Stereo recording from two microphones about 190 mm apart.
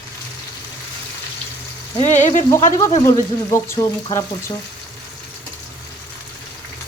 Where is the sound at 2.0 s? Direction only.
35° left (ahead or behind).